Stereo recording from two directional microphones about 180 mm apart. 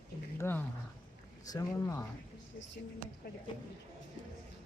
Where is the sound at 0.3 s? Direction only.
10° left (ahead or behind).